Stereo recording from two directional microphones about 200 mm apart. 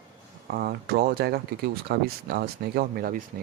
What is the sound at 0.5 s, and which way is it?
Speech, 50° right (ahead or behind).